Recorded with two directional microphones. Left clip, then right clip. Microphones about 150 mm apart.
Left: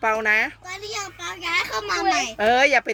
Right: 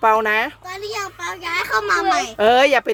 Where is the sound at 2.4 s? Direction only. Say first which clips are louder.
Right 4 dB; 50° right (ahead or behind).